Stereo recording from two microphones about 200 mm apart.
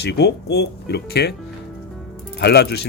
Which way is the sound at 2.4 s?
55° left (ahead or behind).